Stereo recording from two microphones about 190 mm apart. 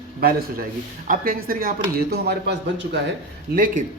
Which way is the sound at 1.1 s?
45° right (ahead or behind).